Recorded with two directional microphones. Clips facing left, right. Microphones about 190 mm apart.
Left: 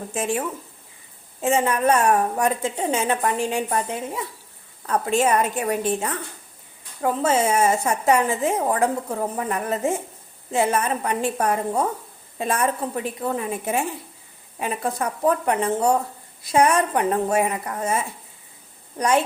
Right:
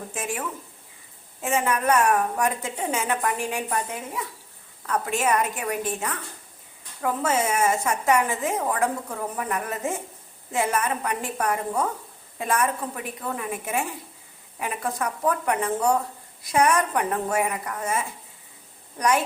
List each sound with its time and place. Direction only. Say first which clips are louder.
0.1 s a woman's voice: left 7 dB; 25° left (ahead or behind)
18.9 s a woman's voice: left 3 dB; 25° left (ahead or behind)